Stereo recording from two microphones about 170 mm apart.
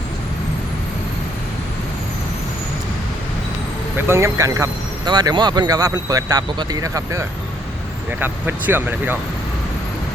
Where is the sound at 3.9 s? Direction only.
15° right (ahead or behind).